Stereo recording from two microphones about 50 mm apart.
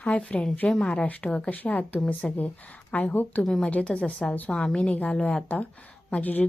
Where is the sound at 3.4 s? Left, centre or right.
Centre.